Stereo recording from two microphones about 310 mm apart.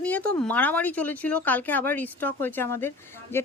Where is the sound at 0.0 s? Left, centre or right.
Centre.